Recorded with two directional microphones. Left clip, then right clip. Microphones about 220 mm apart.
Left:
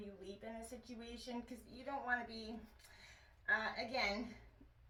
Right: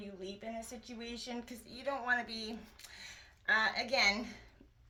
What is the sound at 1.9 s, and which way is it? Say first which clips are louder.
Speech: right 7 dB; 45° right (ahead or behind).